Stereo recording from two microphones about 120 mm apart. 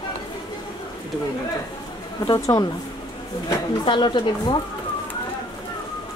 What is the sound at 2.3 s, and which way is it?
Speech, 30° left (ahead or behind).